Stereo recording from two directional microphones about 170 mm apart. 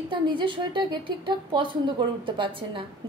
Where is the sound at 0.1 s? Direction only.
30° right (ahead or behind).